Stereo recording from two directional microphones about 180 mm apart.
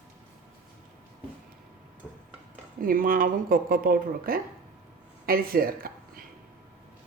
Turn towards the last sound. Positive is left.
turn(degrees=-55)  # may be behind; listen again after turning